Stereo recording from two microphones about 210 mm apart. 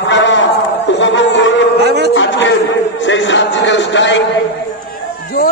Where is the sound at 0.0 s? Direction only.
60° left (ahead or behind).